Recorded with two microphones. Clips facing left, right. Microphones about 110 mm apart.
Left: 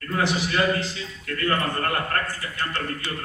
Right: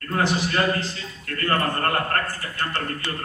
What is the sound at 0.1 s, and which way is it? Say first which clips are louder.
A man's voice: right 1 dB; 40° right (ahead or behind).